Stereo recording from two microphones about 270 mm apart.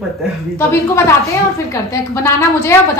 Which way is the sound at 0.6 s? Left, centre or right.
Centre.